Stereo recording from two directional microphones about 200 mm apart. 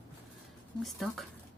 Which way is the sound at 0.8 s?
Centre (ahead or behind).